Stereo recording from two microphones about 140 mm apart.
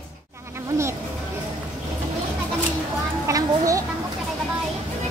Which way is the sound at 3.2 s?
25° right (ahead or behind).